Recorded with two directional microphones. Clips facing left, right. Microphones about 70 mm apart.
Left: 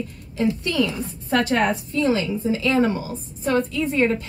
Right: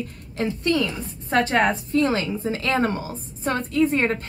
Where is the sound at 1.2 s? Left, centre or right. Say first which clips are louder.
Even; right.